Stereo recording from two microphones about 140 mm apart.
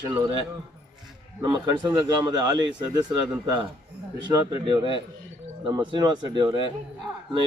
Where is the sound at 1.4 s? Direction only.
30° right (ahead or behind).